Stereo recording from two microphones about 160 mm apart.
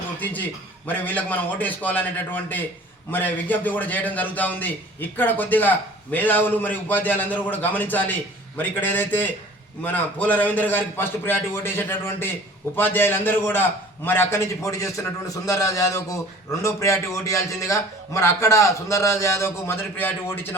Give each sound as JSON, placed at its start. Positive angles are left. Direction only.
{"t": 0.9, "sound": "a man's voice", "side_deg": 10}